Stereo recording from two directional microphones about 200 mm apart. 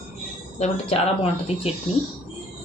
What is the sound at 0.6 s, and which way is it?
Speech, 30° left (ahead or behind).